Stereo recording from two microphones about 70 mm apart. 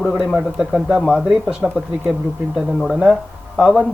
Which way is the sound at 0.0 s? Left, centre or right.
Centre.